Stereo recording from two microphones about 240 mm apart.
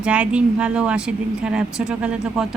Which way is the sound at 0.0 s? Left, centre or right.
Centre.